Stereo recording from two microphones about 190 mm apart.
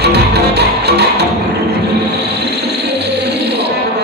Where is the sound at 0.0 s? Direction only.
60° right (ahead or behind).